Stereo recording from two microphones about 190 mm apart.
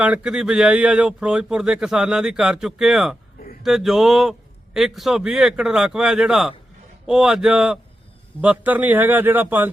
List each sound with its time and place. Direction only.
0.0 s a man's voice: 5° right (ahead or behind)